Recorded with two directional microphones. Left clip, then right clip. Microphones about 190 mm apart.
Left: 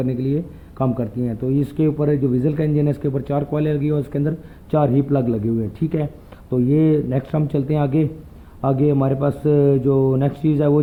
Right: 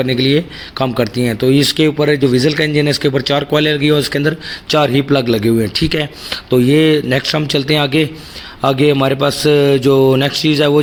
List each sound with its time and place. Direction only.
0.0 s speech: 25° right (ahead or behind)